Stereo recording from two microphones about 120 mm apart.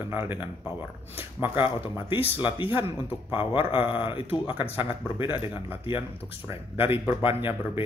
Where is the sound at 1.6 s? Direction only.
45° left (ahead or behind).